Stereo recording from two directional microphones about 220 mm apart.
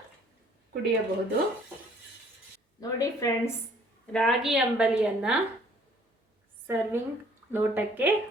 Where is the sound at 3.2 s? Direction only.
15° left (ahead or behind).